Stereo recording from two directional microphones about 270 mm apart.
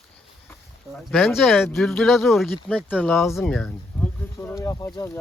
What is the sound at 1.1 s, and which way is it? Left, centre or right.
Speech, centre.